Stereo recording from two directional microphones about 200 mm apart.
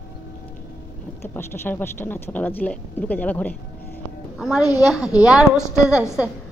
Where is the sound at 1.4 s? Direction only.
10° left (ahead or behind).